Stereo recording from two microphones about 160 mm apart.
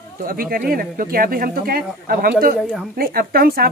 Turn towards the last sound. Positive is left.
turn(degrees=-70)  # may be behind; listen again after turning